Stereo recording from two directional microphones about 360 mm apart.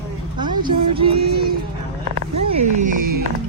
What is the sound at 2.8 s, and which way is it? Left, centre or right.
Speech, right.